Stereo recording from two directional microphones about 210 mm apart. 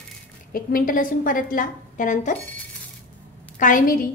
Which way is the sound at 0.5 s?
45° left (ahead or behind).